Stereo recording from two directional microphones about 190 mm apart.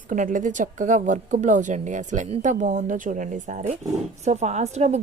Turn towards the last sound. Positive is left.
turn(degrees=-35)  # may be behind; listen again after turning